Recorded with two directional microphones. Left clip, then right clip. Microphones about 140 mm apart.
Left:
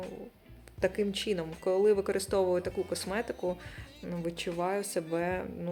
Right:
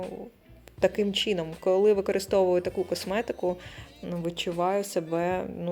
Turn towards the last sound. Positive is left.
turn(degrees=-25)  # may be behind; listen again after turning